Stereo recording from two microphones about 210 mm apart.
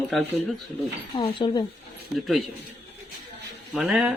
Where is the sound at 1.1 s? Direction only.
25° left (ahead or behind).